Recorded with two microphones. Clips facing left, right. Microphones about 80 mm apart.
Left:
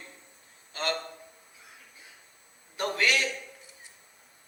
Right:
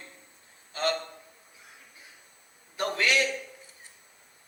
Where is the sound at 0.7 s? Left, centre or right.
Right.